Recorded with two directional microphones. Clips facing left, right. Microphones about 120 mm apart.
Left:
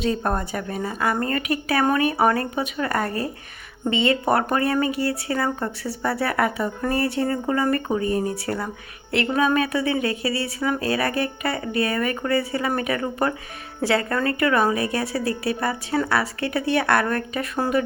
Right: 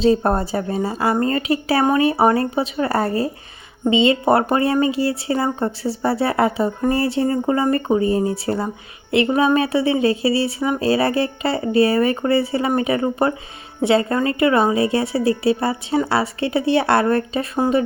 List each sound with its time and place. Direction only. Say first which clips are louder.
0.0 s speech: right 7 dB; 30° right (ahead or behind)